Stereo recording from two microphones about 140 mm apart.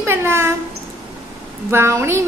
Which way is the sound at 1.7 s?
20° right (ahead or behind).